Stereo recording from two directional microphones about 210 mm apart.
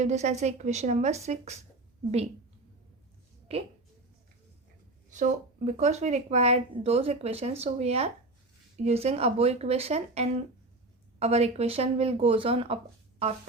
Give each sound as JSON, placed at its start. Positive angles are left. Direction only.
{"t": 0.0, "sound": "speech", "side_deg": -35}
{"t": 3.5, "sound": "speech", "side_deg": -25}
{"t": 5.1, "sound": "speech", "side_deg": -35}